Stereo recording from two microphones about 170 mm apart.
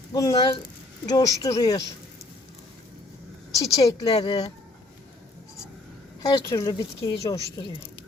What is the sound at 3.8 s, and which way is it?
Speech, 35° left (ahead or behind).